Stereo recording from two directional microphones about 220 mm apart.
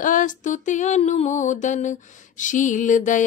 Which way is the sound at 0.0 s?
35° left (ahead or behind).